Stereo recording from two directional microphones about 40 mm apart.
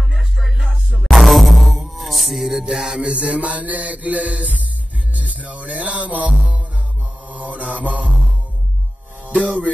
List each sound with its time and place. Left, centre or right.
0.6 s music: right
1.0 s music: centre
2.6 s mantra: centre; by 4.6 s right
5.1 s music: right
7.2 s mantra: right
9.2 s music: right